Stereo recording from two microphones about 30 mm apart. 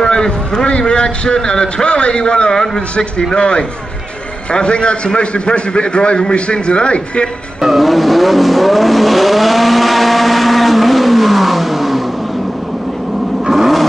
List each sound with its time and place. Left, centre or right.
0.0 s a man's voice: left
1.9 s a man's voice: left
7.6 s vehicle: centre
13.5 s vehicle: centre